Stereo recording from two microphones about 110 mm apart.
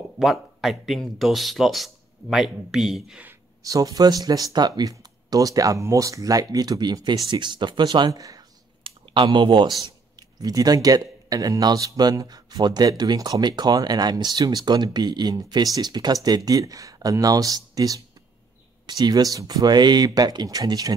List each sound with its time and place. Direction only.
0.2 s speech: 5° right (ahead or behind)
3.6 s speech: 35° right (ahead or behind)
8.8 s a sound: 50° right (ahead or behind)
10.1 s speech: 35° right (ahead or behind)